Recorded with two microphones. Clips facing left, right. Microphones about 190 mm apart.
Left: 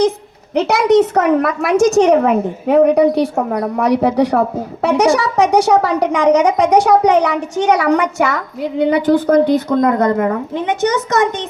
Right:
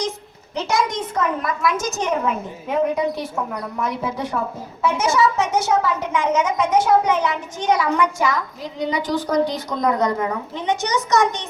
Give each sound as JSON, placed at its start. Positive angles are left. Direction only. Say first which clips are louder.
{"t": 0.5, "sound": "a child's voice", "louder": "left 11 dB", "side_deg": 65}